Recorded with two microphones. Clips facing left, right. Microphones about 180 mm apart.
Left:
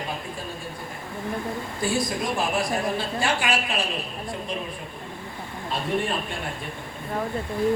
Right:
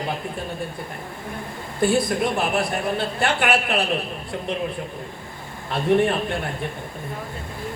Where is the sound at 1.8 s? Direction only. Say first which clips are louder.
Right 7 dB; 60° right (ahead or behind).